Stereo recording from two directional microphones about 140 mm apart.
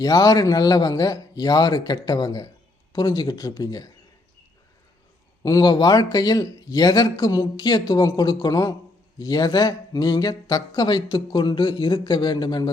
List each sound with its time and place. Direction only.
0.0 s speech: 25° left (ahead or behind)
5.4 s speech: 25° left (ahead or behind)